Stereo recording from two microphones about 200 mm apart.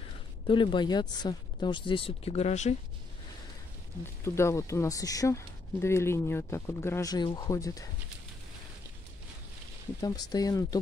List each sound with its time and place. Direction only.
0.5 s speech: 25° left (ahead or behind)
4.0 s speech: 15° left (ahead or behind)
9.9 s speech: 20° left (ahead or behind)